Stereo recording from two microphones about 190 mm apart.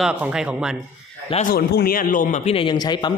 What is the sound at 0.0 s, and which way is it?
Speech, 5° right (ahead or behind).